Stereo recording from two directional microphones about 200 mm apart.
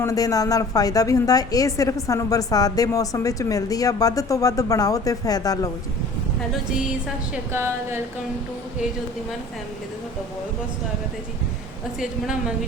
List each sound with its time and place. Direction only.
0.0 s a woman's voice: 15° left (ahead or behind)
7.5 s speech: 15° right (ahead or behind)
11.9 s a woman's voice: 5° right (ahead or behind)